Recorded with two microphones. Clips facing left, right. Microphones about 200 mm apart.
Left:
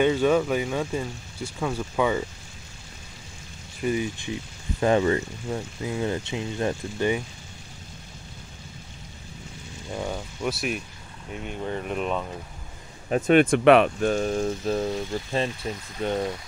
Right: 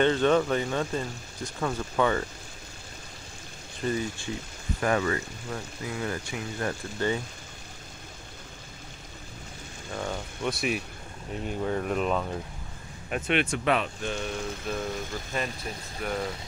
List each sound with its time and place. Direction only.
0.0 s speech: 10° left (ahead or behind)
3.8 s speech: 15° left (ahead or behind)
4.7 s speech: 25° left (ahead or behind)
9.9 s speech: 5° left (ahead or behind)
13.1 s speech: 45° left (ahead or behind); by 16.3 s 25° left (ahead or behind)